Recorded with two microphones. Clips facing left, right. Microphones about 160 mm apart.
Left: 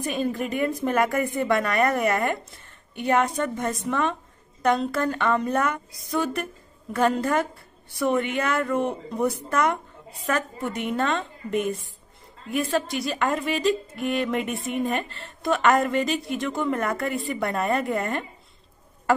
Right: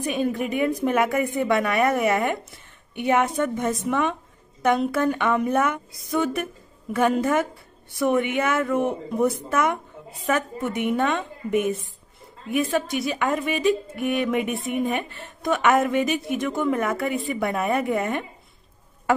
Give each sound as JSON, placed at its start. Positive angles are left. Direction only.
{"t": 0.1, "sound": "a woman's voice", "side_deg": 0}